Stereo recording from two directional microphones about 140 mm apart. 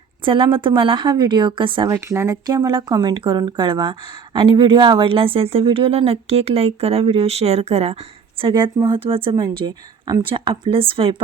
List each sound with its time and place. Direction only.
0.3 s speech: 35° right (ahead or behind)
2.0 s speech: 20° right (ahead or behind); by 7.9 s 50° right (ahead or behind)
8.4 s speech: 35° right (ahead or behind)